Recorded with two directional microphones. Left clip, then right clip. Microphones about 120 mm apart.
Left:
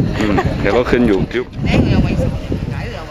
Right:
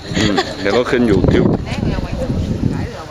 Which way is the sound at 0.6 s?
Centre (ahead or behind).